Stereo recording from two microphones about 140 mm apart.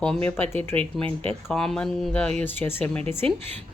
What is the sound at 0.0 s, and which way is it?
A woman's voice, 5° left (ahead or behind).